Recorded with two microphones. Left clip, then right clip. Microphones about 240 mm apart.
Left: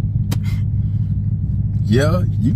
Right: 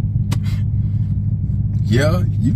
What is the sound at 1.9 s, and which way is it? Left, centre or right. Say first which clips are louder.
Speech: left 1 dB; centre.